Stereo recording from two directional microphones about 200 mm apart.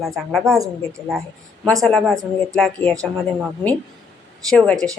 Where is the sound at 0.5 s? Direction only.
15° right (ahead or behind).